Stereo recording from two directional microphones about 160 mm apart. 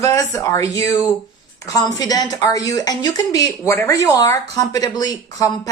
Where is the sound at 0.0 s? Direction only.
20° left (ahead or behind).